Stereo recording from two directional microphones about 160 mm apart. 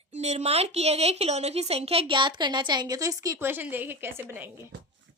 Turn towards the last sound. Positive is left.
turn(degrees=-15)  # may be behind; listen again after turning